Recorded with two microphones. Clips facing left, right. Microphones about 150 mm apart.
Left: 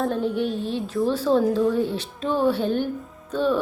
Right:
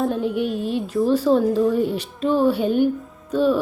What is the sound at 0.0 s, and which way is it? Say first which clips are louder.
Speech: right 2 dB; 5° right (ahead or behind).